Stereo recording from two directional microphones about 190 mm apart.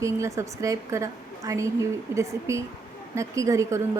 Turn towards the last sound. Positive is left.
turn(degrees=-15)  # may be behind; listen again after turning